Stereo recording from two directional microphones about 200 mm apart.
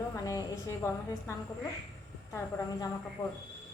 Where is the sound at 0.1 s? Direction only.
15° left (ahead or behind).